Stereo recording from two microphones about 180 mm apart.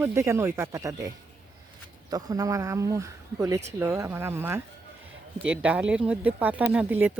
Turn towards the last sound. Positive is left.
turn(degrees=-10)  # may be behind; listen again after turning